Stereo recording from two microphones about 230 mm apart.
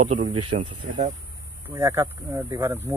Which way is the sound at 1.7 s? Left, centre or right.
Centre.